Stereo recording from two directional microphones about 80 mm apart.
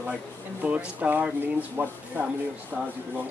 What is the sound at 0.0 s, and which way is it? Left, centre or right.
Speech, centre.